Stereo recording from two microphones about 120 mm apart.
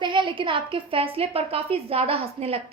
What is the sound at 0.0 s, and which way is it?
A woman's voice, 45° right (ahead or behind).